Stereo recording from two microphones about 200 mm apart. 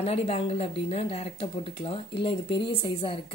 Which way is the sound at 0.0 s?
30° left (ahead or behind).